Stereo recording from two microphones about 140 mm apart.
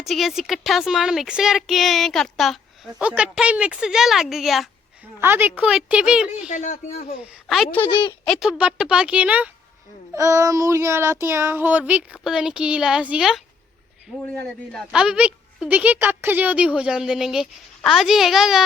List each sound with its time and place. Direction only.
0.0 s a woman's voice: centre (ahead or behind)
5.2 s child singing: 15° right (ahead or behind)
6.5 s speech: 60° left (ahead or behind)
7.2 s a woman's voice: centre (ahead or behind)
7.9 s speech: 35° left (ahead or behind)
8.3 s child singing: 5° right (ahead or behind)
10.2 s child singing: 20° right (ahead or behind); by 13.4 s 5° right (ahead or behind)
14.3 s a woman's voice: 5° left (ahead or behind)
14.9 s a woman's voice: 5° right (ahead or behind)